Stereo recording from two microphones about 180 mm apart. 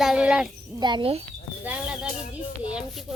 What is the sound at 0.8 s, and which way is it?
Speech, 25° right (ahead or behind).